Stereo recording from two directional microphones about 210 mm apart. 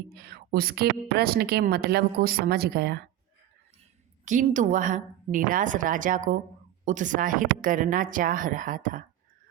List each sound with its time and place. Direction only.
0.1 s a woman's voice: 50° right (ahead or behind)
4.3 s speech: 35° right (ahead or behind)